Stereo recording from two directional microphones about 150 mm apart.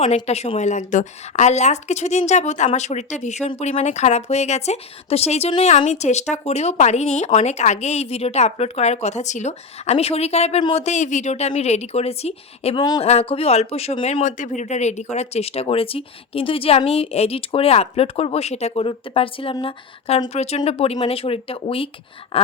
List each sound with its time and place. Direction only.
0.0 s speech: 45° left (ahead or behind)
5.7 s speech: 50° left (ahead or behind); by 10.8 s 35° left (ahead or behind)
10.8 s speech: 50° left (ahead or behind)